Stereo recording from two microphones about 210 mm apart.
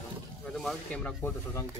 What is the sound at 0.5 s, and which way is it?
Speech, 5° left (ahead or behind).